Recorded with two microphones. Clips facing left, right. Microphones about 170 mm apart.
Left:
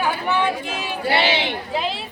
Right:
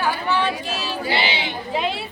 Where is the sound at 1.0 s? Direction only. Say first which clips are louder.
Left 5 dB; 65° left (ahead or behind).